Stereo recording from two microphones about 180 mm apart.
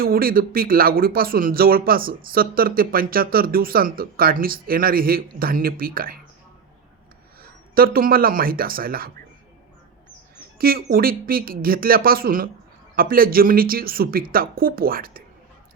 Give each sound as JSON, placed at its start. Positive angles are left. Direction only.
{"t": 0.0, "sound": "speech", "side_deg": -55}
{"t": 7.8, "sound": "speech", "side_deg": -55}
{"t": 10.6, "sound": "speech", "side_deg": -55}